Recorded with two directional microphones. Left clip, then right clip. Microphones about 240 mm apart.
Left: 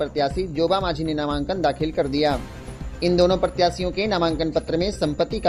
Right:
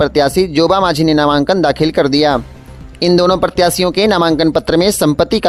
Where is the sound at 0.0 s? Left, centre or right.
Right.